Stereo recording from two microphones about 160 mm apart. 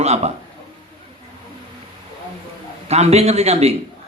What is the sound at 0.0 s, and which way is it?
Speech, 40° right (ahead or behind).